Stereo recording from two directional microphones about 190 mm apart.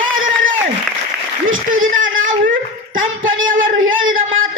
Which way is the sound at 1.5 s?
90° right.